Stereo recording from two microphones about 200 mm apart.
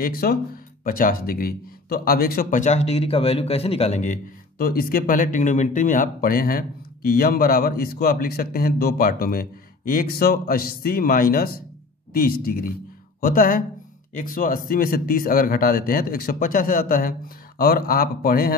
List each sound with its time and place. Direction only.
0.0 s speech: 50° left (ahead or behind)